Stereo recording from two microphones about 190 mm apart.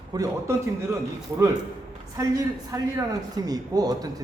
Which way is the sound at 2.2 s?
15° right (ahead or behind).